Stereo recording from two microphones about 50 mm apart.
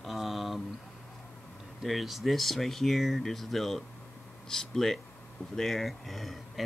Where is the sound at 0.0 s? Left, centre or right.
Centre.